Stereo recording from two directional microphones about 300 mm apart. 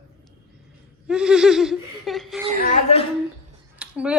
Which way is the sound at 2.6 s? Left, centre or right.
Left.